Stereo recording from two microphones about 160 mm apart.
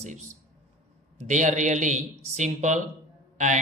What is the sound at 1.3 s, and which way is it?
A man's voice, 50° right (ahead or behind).